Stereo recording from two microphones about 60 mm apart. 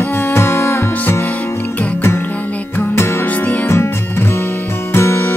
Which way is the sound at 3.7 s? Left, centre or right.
Left.